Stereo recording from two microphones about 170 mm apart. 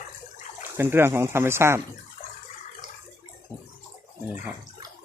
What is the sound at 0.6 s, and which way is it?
Speech, 15° right (ahead or behind).